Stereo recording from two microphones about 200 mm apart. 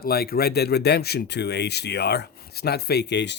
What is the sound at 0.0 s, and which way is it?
Speech, 50° left (ahead or behind).